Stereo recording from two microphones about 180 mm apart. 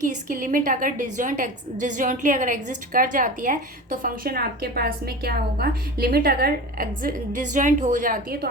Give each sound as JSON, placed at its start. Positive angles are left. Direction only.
{"t": 0.0, "sound": "a woman's voice", "side_deg": -45}